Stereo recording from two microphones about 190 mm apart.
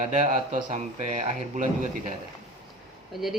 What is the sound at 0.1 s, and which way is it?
A man's voice, 40° right (ahead or behind).